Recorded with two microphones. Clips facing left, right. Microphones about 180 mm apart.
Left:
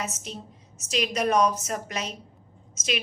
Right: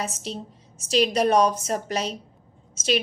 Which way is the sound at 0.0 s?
30° right (ahead or behind).